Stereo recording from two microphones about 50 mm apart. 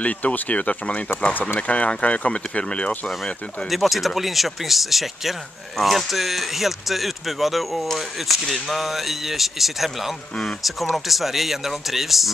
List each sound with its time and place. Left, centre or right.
0.0 s speech: left
3.7 s speech: centre